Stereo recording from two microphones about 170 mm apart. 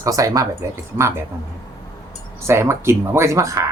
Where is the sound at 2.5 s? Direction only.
15° right (ahead or behind).